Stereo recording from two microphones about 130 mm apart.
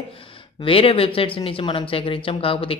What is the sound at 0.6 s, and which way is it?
Speech, 45° left (ahead or behind).